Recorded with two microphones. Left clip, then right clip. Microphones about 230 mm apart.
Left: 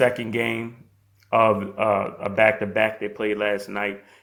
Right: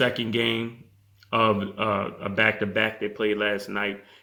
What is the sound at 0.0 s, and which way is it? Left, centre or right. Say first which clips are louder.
Speech: left 3 dB; centre.